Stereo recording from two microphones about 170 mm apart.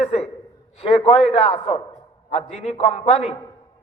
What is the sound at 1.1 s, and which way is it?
A man's voice, 35° left (ahead or behind).